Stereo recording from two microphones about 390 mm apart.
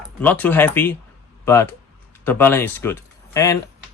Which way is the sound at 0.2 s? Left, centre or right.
Centre.